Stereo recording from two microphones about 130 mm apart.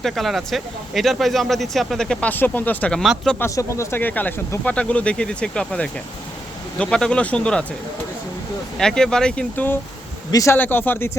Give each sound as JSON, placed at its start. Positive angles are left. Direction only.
{"t": 0.0, "sound": "speech", "side_deg": 0}
{"t": 3.0, "sound": "speech", "side_deg": 0}
{"t": 3.3, "sound": "speech", "side_deg": 20}
{"t": 8.8, "sound": "speech", "side_deg": 5}